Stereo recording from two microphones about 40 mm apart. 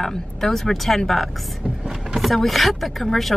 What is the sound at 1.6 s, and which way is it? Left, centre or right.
Vehicle, centre.